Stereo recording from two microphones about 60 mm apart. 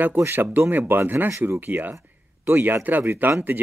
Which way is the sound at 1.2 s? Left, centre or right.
Right.